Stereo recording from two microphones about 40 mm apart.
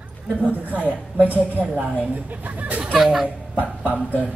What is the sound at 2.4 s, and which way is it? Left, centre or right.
Speech, right.